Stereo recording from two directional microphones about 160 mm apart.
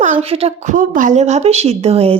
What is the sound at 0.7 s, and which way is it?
A woman's voice, 60° right (ahead or behind).